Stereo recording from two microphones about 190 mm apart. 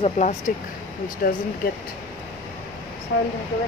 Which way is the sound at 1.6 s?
50° left (ahead or behind).